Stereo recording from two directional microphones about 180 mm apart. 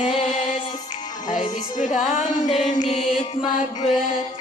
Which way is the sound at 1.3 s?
45° left (ahead or behind).